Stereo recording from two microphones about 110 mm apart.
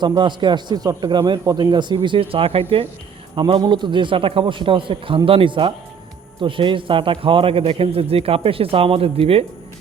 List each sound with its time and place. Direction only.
0.0 s a man's voice: 45° right (ahead or behind)
3.3 s a man's voice: 45° right (ahead or behind)